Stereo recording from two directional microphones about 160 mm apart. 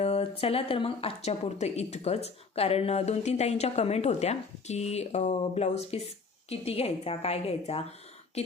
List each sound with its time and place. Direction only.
0.0 s a woman's voice: 40° left (ahead or behind)